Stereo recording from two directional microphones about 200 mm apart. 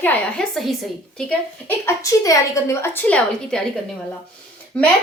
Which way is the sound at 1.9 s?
15° left (ahead or behind).